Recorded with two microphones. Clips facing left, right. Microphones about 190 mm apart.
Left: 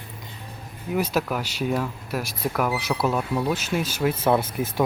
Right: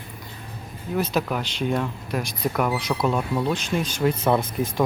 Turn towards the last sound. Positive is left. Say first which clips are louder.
# even
turn(degrees=5)  # may be behind; listen again after turning